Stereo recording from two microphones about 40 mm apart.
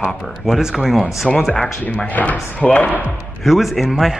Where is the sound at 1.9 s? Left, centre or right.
Left.